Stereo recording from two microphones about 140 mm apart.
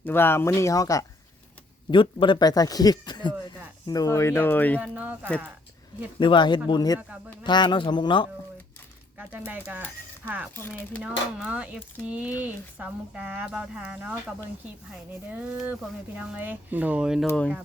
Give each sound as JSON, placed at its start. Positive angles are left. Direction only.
{"t": 0.0, "sound": "speech", "side_deg": 15}
{"t": 1.9, "sound": "speech", "side_deg": 35}
{"t": 4.8, "sound": "speech", "side_deg": -10}
{"t": 6.1, "sound": "speech", "side_deg": 35}
{"t": 9.1, "sound": "speech", "side_deg": -10}
{"t": 10.5, "sound": "speech", "side_deg": 15}
{"t": 11.0, "sound": "speech", "side_deg": -5}
{"t": 15.3, "sound": "speech", "side_deg": -10}